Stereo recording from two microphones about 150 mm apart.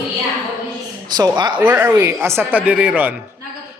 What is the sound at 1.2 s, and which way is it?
Speech, 30° right (ahead or behind).